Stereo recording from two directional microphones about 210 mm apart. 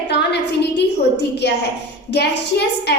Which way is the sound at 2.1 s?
55° left (ahead or behind).